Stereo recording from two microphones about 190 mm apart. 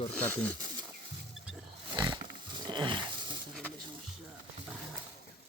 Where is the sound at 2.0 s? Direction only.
25° right (ahead or behind).